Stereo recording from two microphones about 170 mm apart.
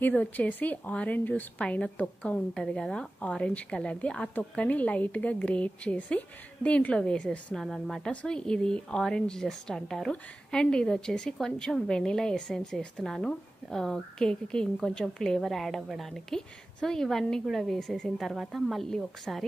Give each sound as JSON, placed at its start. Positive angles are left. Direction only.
{"t": 0.0, "sound": "a woman's voice", "side_deg": 10}